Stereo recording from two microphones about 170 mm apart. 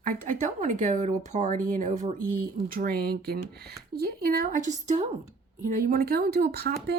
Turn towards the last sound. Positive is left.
turn(degrees=-70)  # may be behind; listen again after turning